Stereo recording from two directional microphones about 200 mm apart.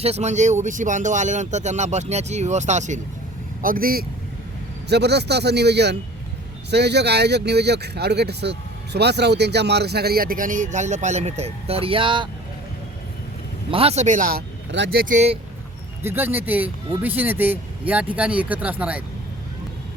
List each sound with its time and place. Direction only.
0.0 s speech: 35° right (ahead or behind)
13.7 s speech: 30° right (ahead or behind); by 15.0 s 55° right (ahead or behind)
15.0 s speech: 35° right (ahead or behind)
16.0 s speech: 10° right (ahead or behind)